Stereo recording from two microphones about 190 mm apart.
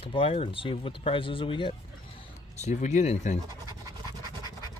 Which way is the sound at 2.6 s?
40° left (ahead or behind).